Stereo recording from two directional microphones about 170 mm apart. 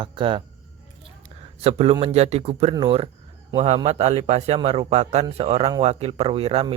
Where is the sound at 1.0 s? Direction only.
35° right (ahead or behind).